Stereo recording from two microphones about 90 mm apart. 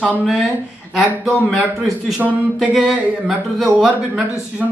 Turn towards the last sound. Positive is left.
turn(degrees=-10)  # may be behind; listen again after turning